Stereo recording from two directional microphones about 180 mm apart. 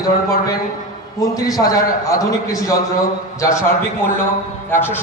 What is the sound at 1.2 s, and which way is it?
A man's voice, 20° left (ahead or behind).